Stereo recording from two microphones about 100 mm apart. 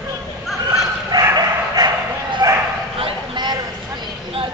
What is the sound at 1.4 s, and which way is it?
Bow-wow, 40° right (ahead or behind).